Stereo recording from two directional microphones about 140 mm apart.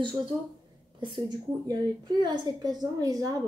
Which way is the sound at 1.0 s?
35° right (ahead or behind).